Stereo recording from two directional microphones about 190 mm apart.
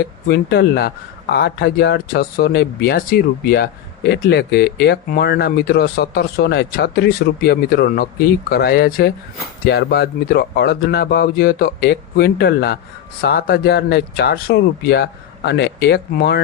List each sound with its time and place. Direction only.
0.3 s speech: 55° left (ahead or behind)